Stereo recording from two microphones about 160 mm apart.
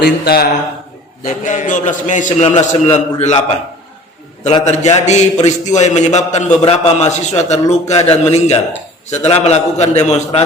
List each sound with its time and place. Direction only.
0.0 s speech: 75° left (ahead or behind)
1.2 s a man's voice: 50° left (ahead or behind)
2.6 s a man's voice: 40° left (ahead or behind)
4.6 s a man's voice: 45° left (ahead or behind)